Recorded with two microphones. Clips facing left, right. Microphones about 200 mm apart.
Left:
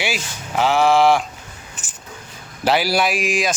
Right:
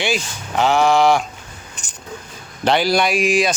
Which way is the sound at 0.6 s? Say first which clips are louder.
Even; 5° left (ahead or behind).